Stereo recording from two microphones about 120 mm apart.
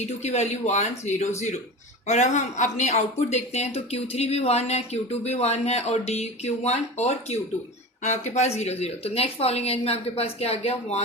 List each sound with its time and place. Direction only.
0.0 s speech: 65° left (ahead or behind)